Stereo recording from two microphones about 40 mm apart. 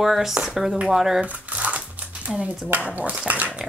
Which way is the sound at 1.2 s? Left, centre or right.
Right.